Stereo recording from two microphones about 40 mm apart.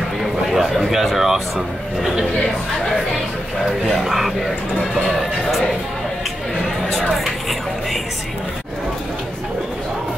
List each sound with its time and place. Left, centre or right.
0.2 s a sound: centre
4.0 s speech: centre
5.1 s music: centre